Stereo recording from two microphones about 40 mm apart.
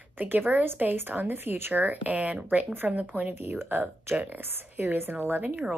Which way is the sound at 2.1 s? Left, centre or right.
Right.